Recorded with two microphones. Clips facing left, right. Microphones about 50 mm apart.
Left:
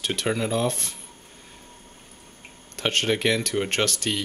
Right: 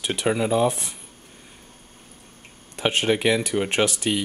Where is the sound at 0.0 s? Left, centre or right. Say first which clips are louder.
Right 3 dB; centre.